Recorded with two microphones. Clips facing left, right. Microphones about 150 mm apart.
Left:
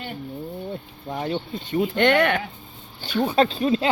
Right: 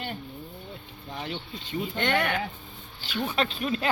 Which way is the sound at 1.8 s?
70° left (ahead or behind).